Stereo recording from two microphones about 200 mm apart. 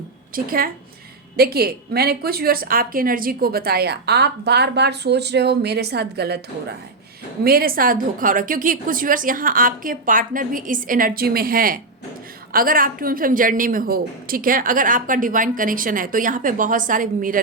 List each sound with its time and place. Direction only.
0.3 s a woman's voice: 45° right (ahead or behind)